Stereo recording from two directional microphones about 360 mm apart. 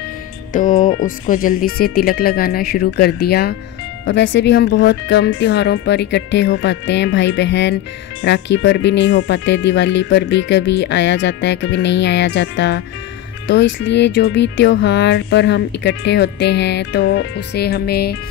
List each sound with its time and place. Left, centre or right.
0.5 s speech: left